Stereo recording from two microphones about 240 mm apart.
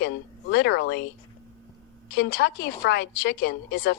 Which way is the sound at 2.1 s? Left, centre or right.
Left.